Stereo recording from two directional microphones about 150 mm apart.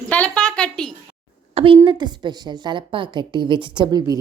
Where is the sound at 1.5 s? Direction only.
35° right (ahead or behind).